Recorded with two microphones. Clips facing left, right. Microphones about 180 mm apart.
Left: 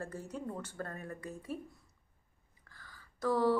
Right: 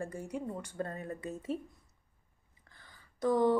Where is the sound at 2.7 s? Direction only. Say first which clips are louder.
Left 2 dB; 20° right (ahead or behind).